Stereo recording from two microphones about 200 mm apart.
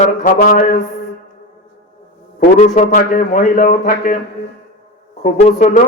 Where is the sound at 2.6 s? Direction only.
40° left (ahead or behind).